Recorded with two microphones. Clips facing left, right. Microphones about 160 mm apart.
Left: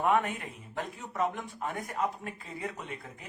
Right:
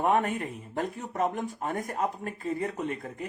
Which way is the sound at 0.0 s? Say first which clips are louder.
Right 2 dB; 40° right (ahead or behind).